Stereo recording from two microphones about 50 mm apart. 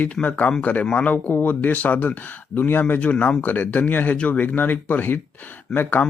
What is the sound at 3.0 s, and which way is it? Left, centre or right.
Speech, left.